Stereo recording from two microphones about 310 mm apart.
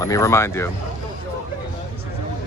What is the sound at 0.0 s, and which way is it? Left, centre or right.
Speech, centre.